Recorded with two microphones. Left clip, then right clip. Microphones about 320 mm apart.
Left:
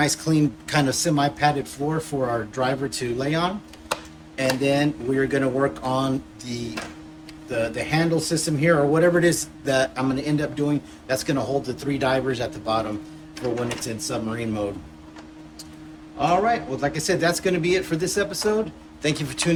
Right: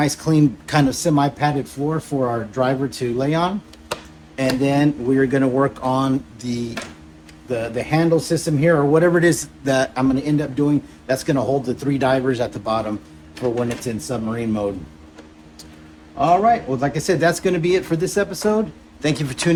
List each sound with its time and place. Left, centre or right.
0.0 s speech: centre
13.9 s speech: centre
16.2 s speech: centre